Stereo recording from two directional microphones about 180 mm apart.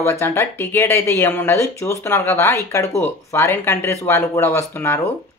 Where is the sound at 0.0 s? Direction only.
15° left (ahead or behind).